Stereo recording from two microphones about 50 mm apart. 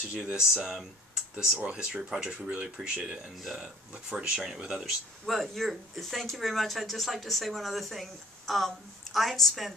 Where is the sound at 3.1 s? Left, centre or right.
Centre.